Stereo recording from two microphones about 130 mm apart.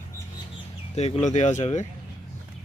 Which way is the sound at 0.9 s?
55° left (ahead or behind).